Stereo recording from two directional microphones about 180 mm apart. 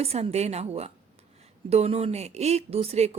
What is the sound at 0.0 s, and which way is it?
Speech, 35° right (ahead or behind).